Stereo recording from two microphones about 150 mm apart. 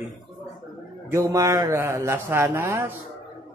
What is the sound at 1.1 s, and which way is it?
Speech, 20° right (ahead or behind).